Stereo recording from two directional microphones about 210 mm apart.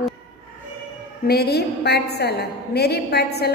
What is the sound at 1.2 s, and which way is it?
A woman's voice, 50° left (ahead or behind).